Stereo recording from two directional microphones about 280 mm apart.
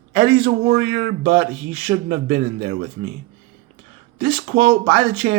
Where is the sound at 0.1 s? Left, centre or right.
Right.